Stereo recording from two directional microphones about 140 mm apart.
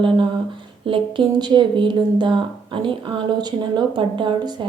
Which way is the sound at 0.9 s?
40° right (ahead or behind).